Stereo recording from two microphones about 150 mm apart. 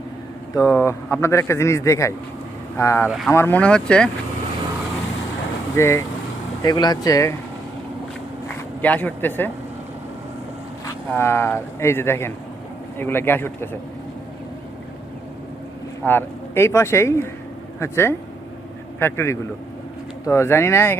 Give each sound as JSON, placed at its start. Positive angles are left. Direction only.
{"t": 0.5, "sound": "a man's voice", "side_deg": 20}
{"t": 5.7, "sound": "speech", "side_deg": 20}
{"t": 6.6, "sound": "a man's voice", "side_deg": 30}
{"t": 8.8, "sound": "speech", "side_deg": 10}
{"t": 10.8, "sound": "speech", "side_deg": 15}
{"t": 16.0, "sound": "speech", "side_deg": 15}